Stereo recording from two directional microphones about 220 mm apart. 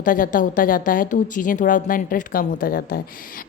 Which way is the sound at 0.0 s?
40° left (ahead or behind).